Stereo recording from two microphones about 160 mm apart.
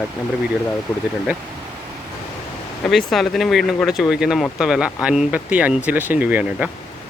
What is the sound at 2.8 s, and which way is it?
Speech, centre (ahead or behind).